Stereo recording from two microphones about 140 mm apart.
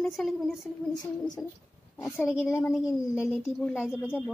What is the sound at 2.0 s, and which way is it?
Speech, 15° left (ahead or behind).